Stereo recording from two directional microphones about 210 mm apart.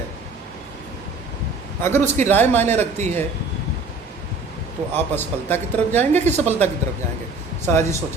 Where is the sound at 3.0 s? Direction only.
35° right (ahead or behind).